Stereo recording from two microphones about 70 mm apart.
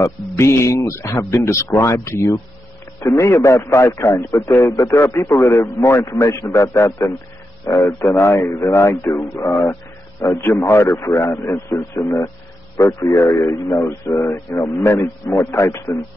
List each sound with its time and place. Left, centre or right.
0.0 s a man's voice: left
4.9 s a man's voice: left
8.1 s a man's voice: left